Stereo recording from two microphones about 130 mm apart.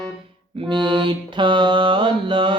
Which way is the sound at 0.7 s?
40° right (ahead or behind).